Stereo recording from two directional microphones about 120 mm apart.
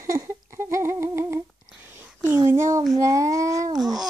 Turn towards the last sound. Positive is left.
turn(degrees=-30)  # may be behind; listen again after turning